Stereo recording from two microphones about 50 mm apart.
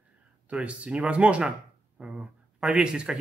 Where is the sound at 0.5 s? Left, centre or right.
Right.